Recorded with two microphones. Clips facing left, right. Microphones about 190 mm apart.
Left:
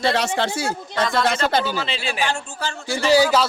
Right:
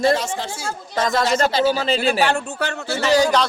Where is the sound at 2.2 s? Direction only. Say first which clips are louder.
Right 4 dB; 60° right (ahead or behind).